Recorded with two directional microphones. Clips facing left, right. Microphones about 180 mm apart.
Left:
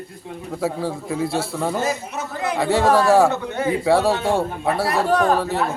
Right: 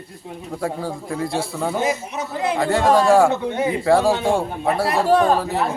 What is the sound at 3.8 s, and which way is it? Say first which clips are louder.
Speech: right 2 dB; 5° left (ahead or behind).